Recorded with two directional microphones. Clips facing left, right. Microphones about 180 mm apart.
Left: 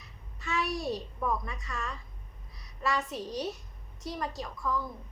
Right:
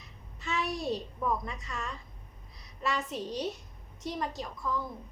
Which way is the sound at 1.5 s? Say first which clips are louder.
Even; 20° right (ahead or behind).